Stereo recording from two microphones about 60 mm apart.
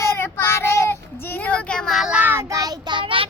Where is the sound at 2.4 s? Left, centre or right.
Right.